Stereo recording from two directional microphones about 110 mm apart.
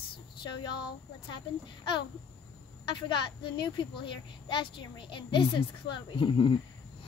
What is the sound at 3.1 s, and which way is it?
A woman's voice, 45° left (ahead or behind).